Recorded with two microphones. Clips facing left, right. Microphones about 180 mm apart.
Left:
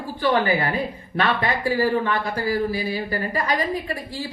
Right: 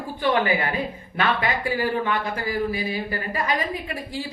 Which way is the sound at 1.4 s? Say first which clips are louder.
Left 3 dB; 35° left (ahead or behind).